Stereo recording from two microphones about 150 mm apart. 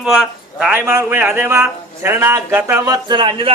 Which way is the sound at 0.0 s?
5° right (ahead or behind).